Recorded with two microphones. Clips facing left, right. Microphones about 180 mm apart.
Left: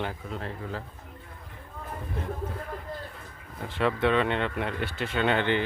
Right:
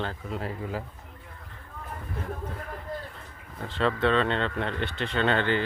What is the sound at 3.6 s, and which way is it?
Speech, 10° left (ahead or behind).